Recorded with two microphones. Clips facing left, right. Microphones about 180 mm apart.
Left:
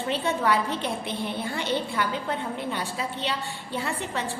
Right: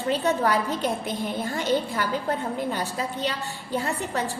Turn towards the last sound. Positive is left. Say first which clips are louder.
# right 3 dB
turn(degrees=-40)  # may be behind; listen again after turning